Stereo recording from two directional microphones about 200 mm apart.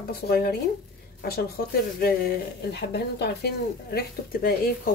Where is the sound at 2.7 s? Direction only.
55° left (ahead or behind).